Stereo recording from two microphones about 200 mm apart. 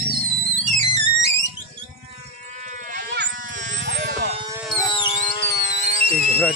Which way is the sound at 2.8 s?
50° right (ahead or behind).